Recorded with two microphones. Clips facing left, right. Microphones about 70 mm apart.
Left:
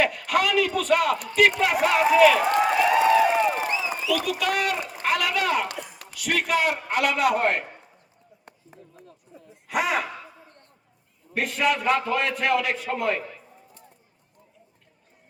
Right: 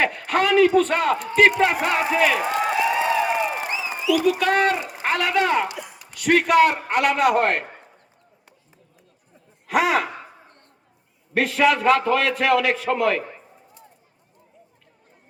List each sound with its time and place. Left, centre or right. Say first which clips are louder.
0.0 s a man's voice: right 2 dB; right
2.4 s run: left 2 dB; centre
2.7 s a sound: left 3 dB; centre
4.4 s a man's voice: right 5 dB; right
4.8 s a sound: right 1 dB; centre
5.0 s speech: right 3 dB; right
5.6 s speech: right 2 dB; centre
6.3 s a man's voice: right 7 dB; right
9.6 s speech: right 5 dB; right
10.1 s a sound: right 2 dB; right
11.3 s a man's voice: right 5 dB; right